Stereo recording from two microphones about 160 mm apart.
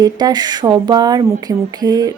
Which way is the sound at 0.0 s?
25° right (ahead or behind).